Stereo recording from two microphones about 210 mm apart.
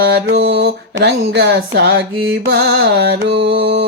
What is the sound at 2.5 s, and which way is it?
Music, 50° right (ahead or behind).